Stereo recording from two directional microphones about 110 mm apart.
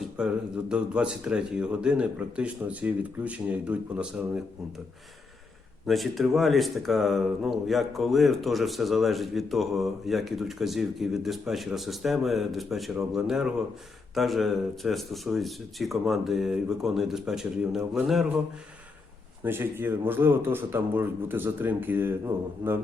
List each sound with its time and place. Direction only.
0.2 s speech: 10° right (ahead or behind)
5.8 s speech: centre (ahead or behind)
19.5 s speech: 20° right (ahead or behind)